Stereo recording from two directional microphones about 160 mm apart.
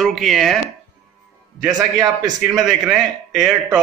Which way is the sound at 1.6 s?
25° right (ahead or behind).